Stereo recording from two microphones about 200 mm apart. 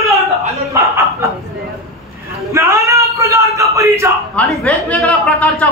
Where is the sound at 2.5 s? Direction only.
15° right (ahead or behind).